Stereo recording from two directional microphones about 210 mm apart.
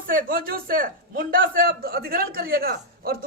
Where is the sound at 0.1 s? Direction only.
40° right (ahead or behind).